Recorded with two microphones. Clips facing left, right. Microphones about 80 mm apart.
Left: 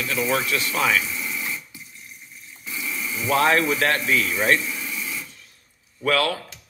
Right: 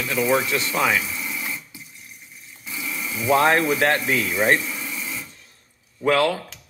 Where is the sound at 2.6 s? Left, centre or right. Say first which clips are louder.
Even; centre.